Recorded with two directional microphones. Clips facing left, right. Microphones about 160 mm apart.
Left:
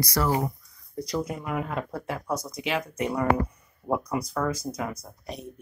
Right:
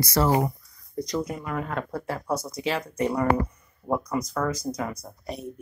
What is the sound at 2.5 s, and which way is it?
Speech, 15° left (ahead or behind).